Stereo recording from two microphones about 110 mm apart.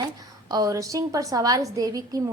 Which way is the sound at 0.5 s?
30° right (ahead or behind).